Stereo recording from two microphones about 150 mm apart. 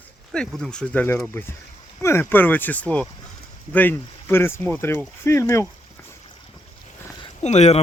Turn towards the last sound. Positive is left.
turn(degrees=50)  # may be behind; listen again after turning